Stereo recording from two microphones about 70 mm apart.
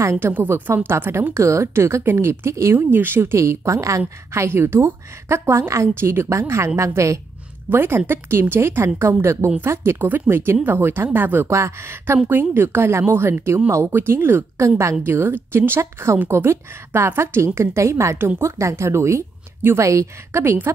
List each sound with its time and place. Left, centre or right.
0.0 s a woman's voice: right
4.3 s a woman's voice: right
7.7 s a woman's voice: right
11.4 s a woman's voice: right
19.9 s a woman's voice: right
20.4 s a woman's voice: right